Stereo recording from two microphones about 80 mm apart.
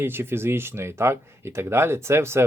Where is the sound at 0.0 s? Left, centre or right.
Right.